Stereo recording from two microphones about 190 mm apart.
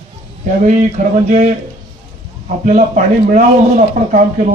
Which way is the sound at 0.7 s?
40° right (ahead or behind).